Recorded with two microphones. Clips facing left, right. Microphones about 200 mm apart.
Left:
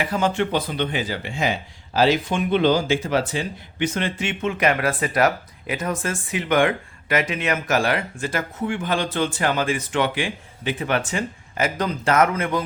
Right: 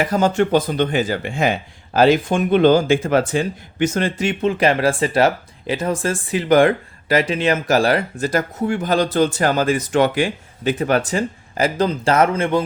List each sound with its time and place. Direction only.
0.0 s speech: 40° right (ahead or behind)